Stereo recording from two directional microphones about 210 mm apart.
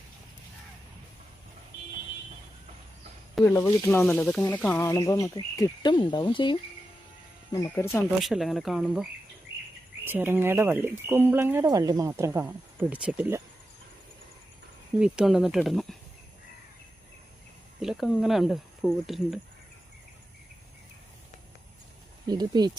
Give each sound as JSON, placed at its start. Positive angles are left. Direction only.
{"t": 3.4, "sound": "speech", "side_deg": 10}
{"t": 8.2, "sound": "speech", "side_deg": 0}
{"t": 14.9, "sound": "speech", "side_deg": -5}
{"t": 17.7, "sound": "speech", "side_deg": 0}
{"t": 22.3, "sound": "speech", "side_deg": -20}